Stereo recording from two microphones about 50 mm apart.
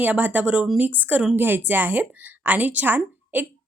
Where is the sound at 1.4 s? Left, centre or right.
Right.